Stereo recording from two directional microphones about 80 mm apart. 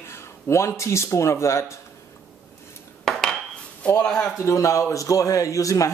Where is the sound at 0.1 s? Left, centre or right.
Left.